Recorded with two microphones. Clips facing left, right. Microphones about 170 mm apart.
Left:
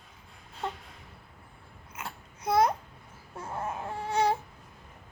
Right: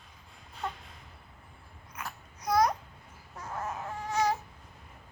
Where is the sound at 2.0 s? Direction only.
25° left (ahead or behind).